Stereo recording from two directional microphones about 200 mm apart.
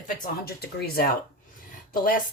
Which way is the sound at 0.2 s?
50° left (ahead or behind).